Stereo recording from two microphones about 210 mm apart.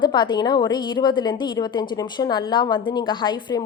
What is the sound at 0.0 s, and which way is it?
A woman's voice, 20° left (ahead or behind).